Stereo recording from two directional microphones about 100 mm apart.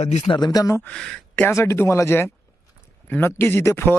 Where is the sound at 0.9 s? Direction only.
10° left (ahead or behind).